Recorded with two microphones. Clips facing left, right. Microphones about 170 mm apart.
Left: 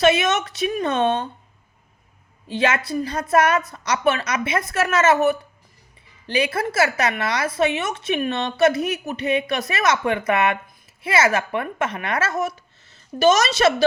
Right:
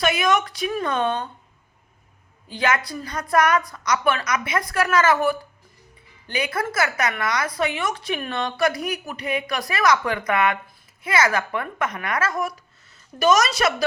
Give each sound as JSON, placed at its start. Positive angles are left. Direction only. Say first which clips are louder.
{"t": 0.0, "sound": "a woman's voice", "louder": "left 3 dB", "side_deg": 25}
{"t": 2.5, "sound": "a woman's voice", "louder": "left 2 dB", "side_deg": 25}